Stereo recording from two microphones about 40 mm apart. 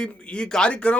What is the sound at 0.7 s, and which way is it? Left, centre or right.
Speech, left.